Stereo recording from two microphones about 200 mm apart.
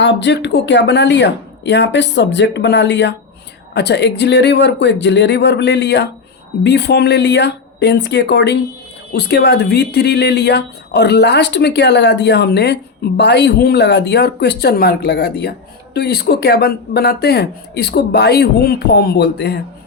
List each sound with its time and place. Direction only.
0.0 s speech: 60° left (ahead or behind)